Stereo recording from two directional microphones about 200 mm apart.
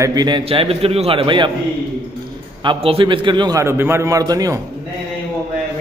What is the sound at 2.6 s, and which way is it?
A man's voice, 25° right (ahead or behind).